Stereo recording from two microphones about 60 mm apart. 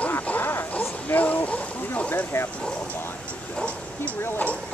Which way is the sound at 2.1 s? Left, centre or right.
Left.